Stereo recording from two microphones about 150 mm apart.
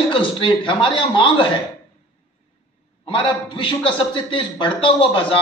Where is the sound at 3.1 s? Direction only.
35° left (ahead or behind).